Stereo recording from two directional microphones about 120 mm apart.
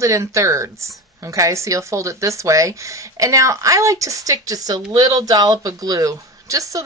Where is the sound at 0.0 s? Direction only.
25° right (ahead or behind).